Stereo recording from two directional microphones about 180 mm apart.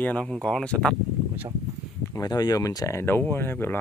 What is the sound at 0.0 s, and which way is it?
Speech, 5° left (ahead or behind).